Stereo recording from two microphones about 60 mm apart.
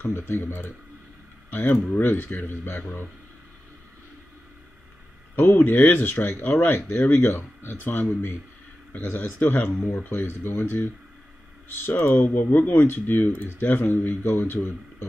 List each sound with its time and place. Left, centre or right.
0.1 s speech: left
5.3 s speech: left
11.8 s speech: left